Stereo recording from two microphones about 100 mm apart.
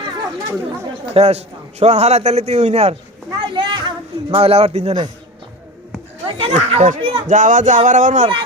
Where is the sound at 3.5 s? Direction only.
50° right (ahead or behind).